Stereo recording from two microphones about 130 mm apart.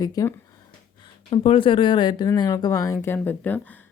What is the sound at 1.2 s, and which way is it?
A woman's voice, 45° left (ahead or behind).